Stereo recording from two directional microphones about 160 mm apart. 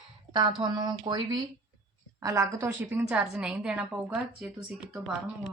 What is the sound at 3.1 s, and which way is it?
Speech, 5° right (ahead or behind).